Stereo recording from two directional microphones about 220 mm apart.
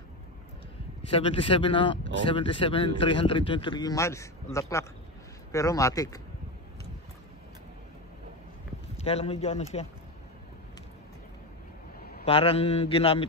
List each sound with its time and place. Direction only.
1.1 s speech: 25° left (ahead or behind)
8.9 s speech: 25° left (ahead or behind)
12.0 s a sound: 45° left (ahead or behind)
12.3 s speech: 25° left (ahead or behind)